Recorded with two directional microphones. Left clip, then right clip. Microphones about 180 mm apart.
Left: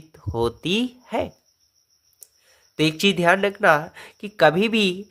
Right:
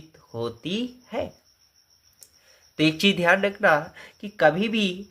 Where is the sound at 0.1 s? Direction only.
45° left (ahead or behind).